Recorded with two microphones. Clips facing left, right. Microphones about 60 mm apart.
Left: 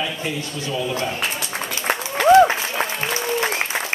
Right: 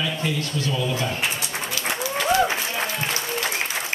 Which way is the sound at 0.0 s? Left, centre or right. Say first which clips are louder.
Even; centre.